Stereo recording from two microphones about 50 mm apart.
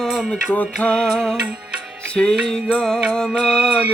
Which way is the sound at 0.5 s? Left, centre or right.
Left.